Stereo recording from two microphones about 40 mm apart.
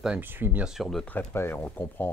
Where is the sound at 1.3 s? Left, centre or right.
Left.